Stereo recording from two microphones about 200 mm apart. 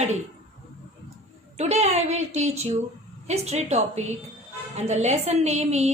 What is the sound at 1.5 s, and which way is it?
A woman's voice, 35° right (ahead or behind).